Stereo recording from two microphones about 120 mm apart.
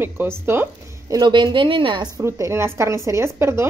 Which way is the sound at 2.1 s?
25° right (ahead or behind).